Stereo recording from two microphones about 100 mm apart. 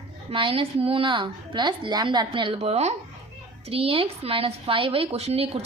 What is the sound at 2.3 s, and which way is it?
Speech, 55° right (ahead or behind).